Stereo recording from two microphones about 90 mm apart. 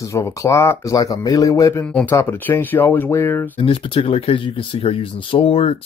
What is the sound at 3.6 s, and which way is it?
Speech, 90° left.